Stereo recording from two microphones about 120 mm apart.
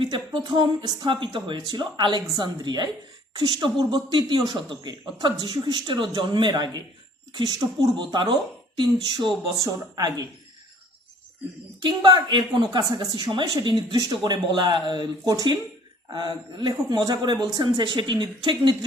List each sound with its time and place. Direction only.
0.0 s speech: 45° right (ahead or behind)
11.8 s speech: 40° right (ahead or behind)